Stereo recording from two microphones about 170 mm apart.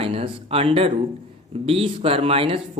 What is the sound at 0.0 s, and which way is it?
A man's voice, 35° right (ahead or behind).